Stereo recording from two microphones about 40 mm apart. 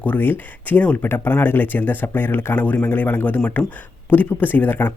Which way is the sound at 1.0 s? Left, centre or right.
Left.